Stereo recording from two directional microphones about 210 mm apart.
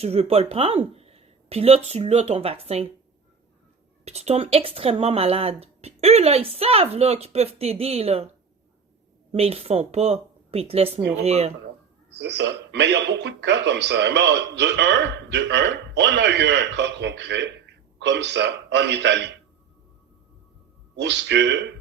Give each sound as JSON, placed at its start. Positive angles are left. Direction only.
{"t": 0.0, "sound": "speech", "side_deg": -30}
{"t": 4.0, "sound": "speech", "side_deg": -30}
{"t": 9.3, "sound": "speech", "side_deg": -30}
{"t": 12.1, "sound": "speech", "side_deg": -55}
{"t": 20.9, "sound": "speech", "side_deg": -55}